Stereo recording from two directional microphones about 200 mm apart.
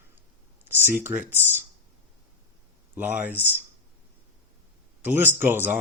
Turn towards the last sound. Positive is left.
turn(degrees=-10)  # may be behind; listen again after turning